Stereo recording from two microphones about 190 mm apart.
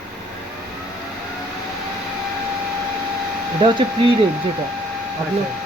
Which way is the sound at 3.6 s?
25° right (ahead or behind).